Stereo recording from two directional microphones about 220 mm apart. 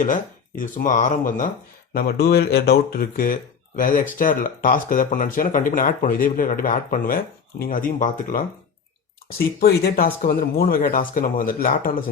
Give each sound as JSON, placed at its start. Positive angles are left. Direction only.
{"t": 0.0, "sound": "speech", "side_deg": 35}